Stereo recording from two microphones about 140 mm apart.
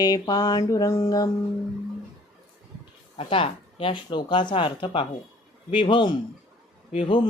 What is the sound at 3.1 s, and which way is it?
Speech, 40° left (ahead or behind).